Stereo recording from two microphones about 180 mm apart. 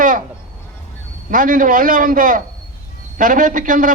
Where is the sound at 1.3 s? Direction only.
45° right (ahead or behind).